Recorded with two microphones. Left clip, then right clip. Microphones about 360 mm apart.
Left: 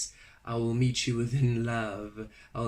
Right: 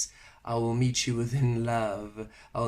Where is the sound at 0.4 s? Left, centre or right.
Centre.